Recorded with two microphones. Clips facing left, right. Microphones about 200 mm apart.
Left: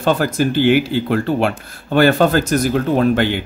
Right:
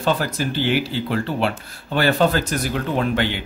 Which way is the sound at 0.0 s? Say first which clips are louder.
Left 5 dB; 50° left (ahead or behind).